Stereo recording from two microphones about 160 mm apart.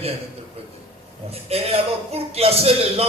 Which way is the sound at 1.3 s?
40° right (ahead or behind).